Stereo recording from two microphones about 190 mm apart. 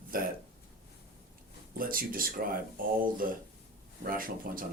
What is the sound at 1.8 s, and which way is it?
Speech, 50° right (ahead or behind).